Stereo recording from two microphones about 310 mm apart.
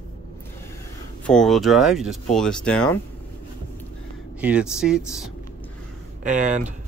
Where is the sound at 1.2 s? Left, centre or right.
Centre.